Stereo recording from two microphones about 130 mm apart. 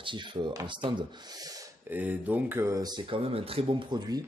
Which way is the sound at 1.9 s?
15° right (ahead or behind).